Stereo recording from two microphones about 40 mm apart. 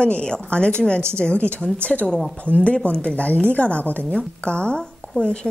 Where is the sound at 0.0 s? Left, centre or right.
Left.